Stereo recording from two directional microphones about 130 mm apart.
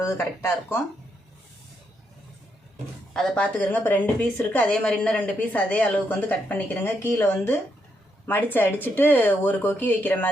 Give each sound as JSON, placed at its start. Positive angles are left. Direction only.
{"t": 0.0, "sound": "a woman's voice", "side_deg": 20}
{"t": 3.1, "sound": "a woman's voice", "side_deg": 5}